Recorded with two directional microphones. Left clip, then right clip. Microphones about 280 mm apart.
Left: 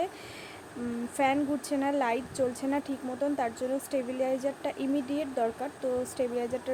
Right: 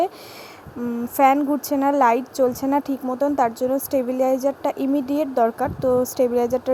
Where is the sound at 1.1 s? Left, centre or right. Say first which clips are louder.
Right 11 dB; right.